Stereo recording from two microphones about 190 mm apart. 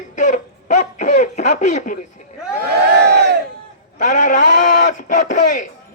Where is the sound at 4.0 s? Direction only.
40° left (ahead or behind).